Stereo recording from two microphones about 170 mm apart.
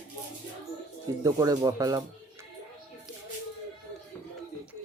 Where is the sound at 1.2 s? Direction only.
20° right (ahead or behind).